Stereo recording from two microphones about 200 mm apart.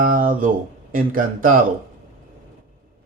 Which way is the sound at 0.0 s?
45° right (ahead or behind).